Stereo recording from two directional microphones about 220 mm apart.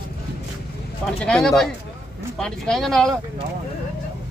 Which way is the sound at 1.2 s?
5° left (ahead or behind).